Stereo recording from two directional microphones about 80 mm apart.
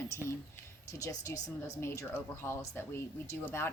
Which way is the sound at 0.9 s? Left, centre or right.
Left.